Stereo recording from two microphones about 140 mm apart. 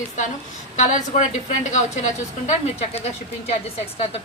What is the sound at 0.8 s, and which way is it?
A woman's voice, 55° left (ahead or behind).